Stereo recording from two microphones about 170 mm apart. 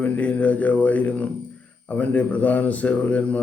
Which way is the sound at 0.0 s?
10° left (ahead or behind).